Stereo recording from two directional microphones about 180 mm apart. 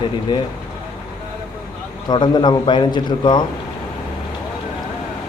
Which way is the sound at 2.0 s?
25° left (ahead or behind).